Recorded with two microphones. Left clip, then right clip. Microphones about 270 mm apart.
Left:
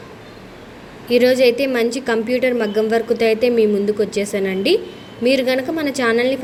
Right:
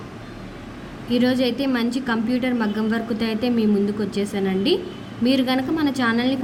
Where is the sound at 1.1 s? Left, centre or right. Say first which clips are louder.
Left 8 dB; centre.